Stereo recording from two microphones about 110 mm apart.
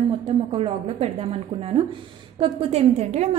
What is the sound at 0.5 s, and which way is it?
A woman's voice, 60° right (ahead or behind).